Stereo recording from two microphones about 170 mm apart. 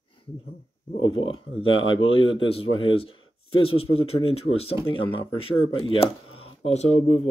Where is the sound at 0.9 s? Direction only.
30° left (ahead or behind).